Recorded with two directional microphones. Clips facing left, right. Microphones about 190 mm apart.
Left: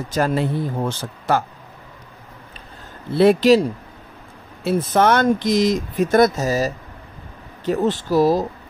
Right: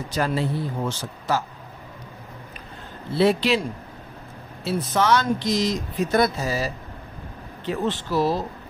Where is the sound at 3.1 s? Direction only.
55° left (ahead or behind).